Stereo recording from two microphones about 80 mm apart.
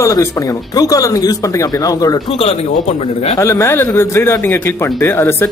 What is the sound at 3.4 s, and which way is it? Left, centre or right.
A man's voice, left.